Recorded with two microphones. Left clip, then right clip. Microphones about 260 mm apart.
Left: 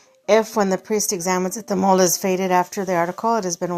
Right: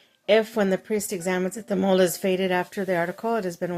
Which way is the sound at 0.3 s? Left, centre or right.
Left.